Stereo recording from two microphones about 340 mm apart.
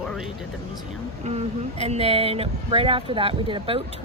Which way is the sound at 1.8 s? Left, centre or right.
Centre.